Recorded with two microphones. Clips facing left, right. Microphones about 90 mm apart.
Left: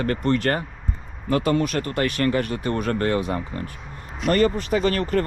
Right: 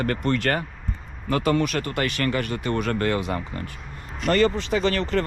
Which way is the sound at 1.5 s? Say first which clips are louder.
Right 2 dB; 60° right (ahead or behind).